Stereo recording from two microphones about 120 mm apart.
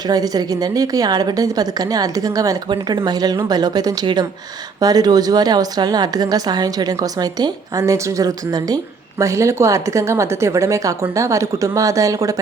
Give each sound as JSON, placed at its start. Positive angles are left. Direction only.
{"t": 0.1, "sound": "a woman's voice", "side_deg": -30}